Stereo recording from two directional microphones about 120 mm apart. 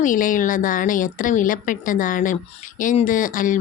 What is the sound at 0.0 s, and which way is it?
A woman's voice, 90° left.